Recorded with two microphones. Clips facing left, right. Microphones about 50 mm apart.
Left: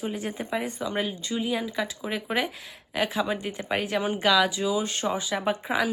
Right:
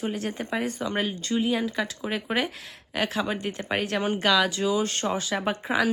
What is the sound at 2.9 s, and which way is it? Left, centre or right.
Speech, centre.